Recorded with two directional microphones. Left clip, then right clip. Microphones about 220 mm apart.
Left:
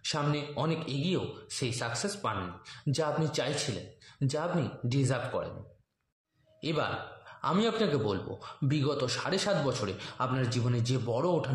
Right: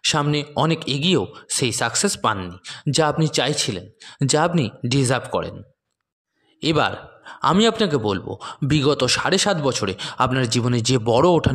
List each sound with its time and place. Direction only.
0.0 s speech: 40° right (ahead or behind)
6.6 s speech: 40° right (ahead or behind)